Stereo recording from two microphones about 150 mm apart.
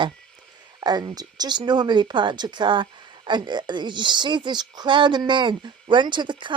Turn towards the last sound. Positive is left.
turn(degrees=-30)  # may be behind; listen again after turning